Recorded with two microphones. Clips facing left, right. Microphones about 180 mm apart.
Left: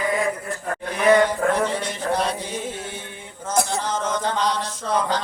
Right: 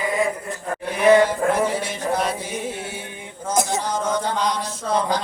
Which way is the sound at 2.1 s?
10° right (ahead or behind).